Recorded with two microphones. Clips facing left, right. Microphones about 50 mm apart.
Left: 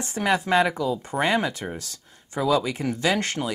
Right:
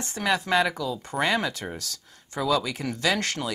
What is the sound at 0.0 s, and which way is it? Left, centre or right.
Speech, centre.